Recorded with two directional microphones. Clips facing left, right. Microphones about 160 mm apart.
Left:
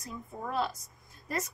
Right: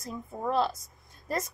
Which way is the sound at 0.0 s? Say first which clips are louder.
Right 6 dB; 30° right (ahead or behind).